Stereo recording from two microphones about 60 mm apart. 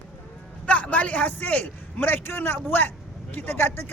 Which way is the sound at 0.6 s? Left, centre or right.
Left.